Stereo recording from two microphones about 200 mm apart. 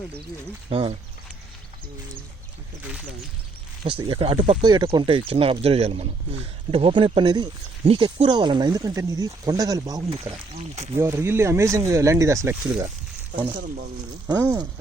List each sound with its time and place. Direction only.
0.7 s speech: 30° right (ahead or behind)
3.8 s speech: 25° right (ahead or behind)
10.1 s speech: 30° right (ahead or behind)
10.9 s speech: 15° right (ahead or behind)
14.3 s speech: 10° right (ahead or behind)